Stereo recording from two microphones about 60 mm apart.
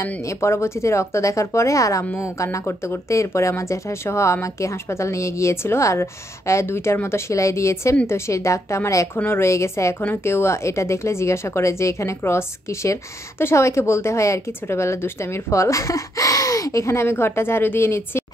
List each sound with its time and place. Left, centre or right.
0.0 s speech: left
9.1 s a woman's voice: left
9.5 s speech: left
17.0 s a woman's voice: left